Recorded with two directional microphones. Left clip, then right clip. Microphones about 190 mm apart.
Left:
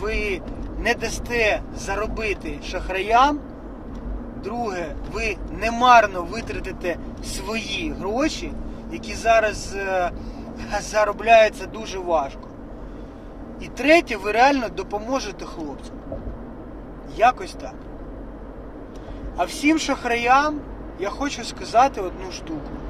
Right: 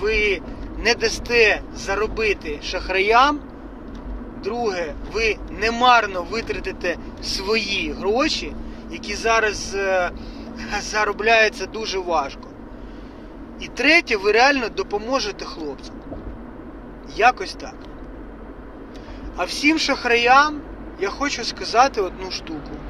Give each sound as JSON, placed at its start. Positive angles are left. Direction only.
{"t": 0.0, "sound": "speech", "side_deg": 15}
{"t": 4.4, "sound": "speech", "side_deg": 15}
{"t": 13.6, "sound": "speech", "side_deg": 15}
{"t": 17.2, "sound": "speech", "side_deg": 10}
{"t": 19.4, "sound": "speech", "side_deg": 15}